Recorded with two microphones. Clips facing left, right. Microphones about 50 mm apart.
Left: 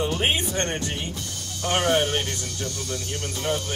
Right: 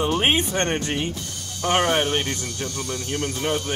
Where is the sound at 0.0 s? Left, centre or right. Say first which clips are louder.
Right 3 dB; right.